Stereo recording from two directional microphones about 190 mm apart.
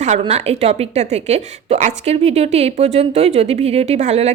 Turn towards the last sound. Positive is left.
turn(degrees=-35)  # may be behind; listen again after turning